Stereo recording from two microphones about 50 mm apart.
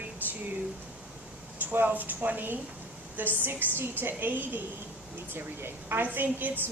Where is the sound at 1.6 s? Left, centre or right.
Right.